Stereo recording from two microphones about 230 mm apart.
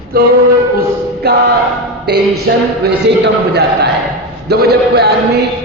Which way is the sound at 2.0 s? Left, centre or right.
Right.